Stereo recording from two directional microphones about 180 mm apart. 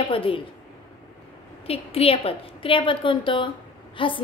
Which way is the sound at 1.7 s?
30° left (ahead or behind).